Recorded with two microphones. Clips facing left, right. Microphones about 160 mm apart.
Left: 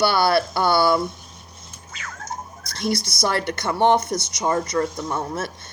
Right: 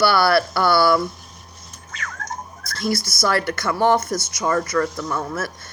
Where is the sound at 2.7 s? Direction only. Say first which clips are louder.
Right 1 dB; 25° left (ahead or behind).